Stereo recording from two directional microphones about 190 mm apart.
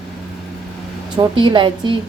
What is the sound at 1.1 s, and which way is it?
Speech, 25° right (ahead or behind).